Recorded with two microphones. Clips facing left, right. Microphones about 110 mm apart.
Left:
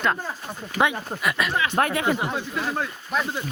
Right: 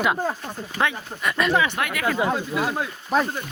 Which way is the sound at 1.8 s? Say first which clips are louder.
Left 5 dB; 35° left (ahead or behind).